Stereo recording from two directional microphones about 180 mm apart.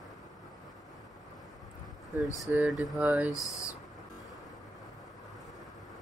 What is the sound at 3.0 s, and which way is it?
Speech, 10° right (ahead or behind).